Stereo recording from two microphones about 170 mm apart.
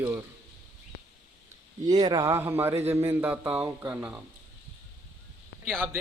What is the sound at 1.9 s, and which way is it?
Speech, 25° right (ahead or behind).